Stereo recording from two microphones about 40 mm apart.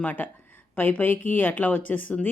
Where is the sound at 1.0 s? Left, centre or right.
Left.